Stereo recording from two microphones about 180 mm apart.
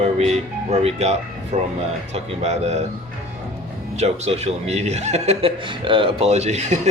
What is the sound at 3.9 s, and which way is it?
A man's voice, 35° right (ahead or behind).